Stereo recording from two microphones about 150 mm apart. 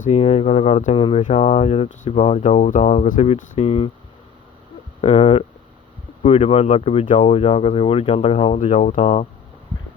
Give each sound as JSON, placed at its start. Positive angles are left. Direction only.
{"t": 0.0, "sound": "speech", "side_deg": 45}
{"t": 0.9, "sound": "speech", "side_deg": 40}
{"t": 4.9, "sound": "speech", "side_deg": 40}
{"t": 8.5, "sound": "speech", "side_deg": 55}